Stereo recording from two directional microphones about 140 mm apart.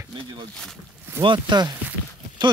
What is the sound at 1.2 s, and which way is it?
Speech, 35° right (ahead or behind).